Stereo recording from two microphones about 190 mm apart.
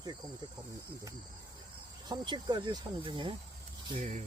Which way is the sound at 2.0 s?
20° right (ahead or behind).